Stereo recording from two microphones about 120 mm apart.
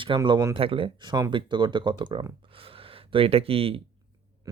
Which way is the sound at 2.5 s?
50° right (ahead or behind).